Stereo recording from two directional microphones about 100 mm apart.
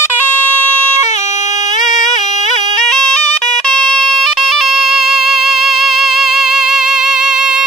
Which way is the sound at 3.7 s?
5° left (ahead or behind).